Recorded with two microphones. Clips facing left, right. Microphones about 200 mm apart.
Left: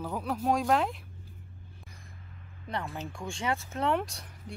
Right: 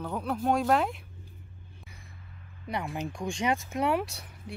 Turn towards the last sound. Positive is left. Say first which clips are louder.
# right 2 dB
turn(degrees=-5)  # may be behind; listen again after turning